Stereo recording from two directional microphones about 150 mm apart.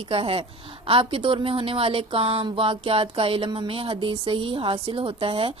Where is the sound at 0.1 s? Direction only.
40° right (ahead or behind).